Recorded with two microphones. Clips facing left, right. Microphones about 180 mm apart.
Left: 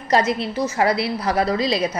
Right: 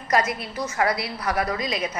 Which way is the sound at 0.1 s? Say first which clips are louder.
Left 5 dB; 25° left (ahead or behind).